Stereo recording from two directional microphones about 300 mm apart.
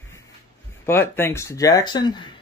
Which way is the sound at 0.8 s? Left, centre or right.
Centre.